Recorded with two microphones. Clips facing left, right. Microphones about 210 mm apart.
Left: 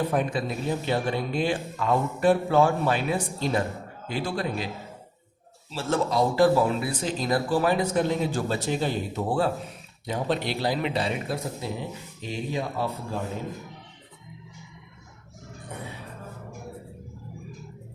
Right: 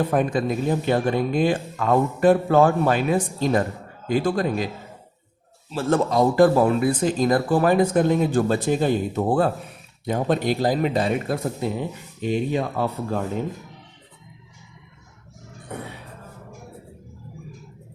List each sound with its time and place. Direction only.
0.1 s speech: 50° right (ahead or behind)
5.7 s speech: 50° right (ahead or behind)